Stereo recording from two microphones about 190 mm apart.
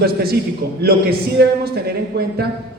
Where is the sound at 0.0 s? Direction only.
55° right (ahead or behind).